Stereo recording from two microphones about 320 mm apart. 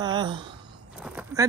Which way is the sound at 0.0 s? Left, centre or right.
Centre.